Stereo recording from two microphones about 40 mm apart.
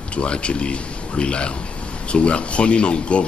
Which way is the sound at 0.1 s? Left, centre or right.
Left.